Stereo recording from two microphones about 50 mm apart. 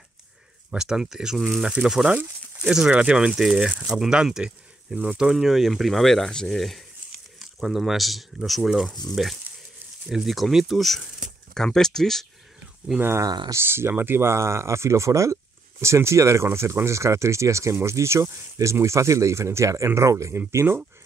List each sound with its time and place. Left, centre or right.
0.7 s speech: centre
2.5 s a sound: centre
2.9 s speech: right
3.2 s speech: centre
11.5 s speech: centre
13.6 s speech: right
15.8 s speech: right
17.7 s speech: right